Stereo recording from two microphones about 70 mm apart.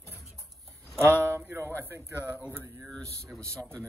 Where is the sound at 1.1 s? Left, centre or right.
Right.